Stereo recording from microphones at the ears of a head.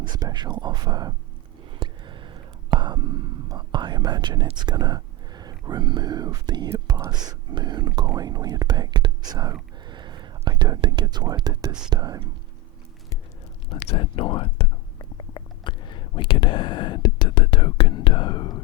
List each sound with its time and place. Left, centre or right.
0.0 s speech: right
1.8 s whispering: right
13.7 s speech: left